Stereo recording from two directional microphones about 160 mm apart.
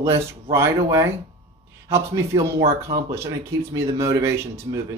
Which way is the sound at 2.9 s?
30° right (ahead or behind).